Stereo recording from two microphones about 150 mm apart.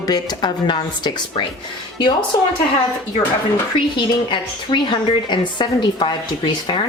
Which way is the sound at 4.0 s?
30° left (ahead or behind).